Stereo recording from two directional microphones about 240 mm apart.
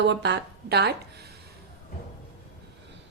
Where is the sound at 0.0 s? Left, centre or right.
Right.